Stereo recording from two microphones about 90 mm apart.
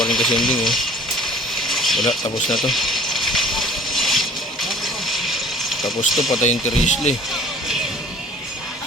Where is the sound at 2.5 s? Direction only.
Centre (ahead or behind).